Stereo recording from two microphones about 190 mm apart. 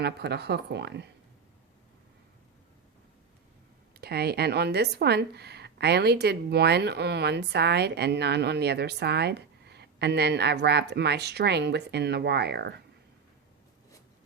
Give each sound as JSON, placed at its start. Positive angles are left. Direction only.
{"t": 0.0, "sound": "a woman's voice", "side_deg": -60}
{"t": 4.0, "sound": "a woman's voice", "side_deg": -55}